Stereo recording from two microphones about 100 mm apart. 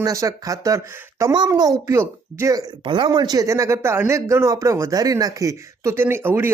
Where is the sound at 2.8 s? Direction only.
55° right (ahead or behind).